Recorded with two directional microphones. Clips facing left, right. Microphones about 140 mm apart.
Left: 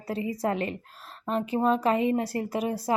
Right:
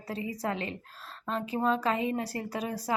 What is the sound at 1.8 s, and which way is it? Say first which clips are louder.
Speech: left 5 dB; 30° left (ahead or behind).